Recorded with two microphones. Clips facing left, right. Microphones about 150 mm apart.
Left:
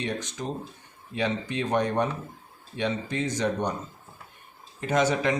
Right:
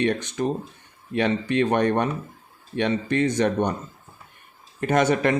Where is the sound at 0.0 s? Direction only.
65° right (ahead or behind).